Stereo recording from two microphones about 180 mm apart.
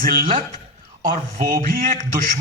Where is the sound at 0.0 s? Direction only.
50° right (ahead or behind).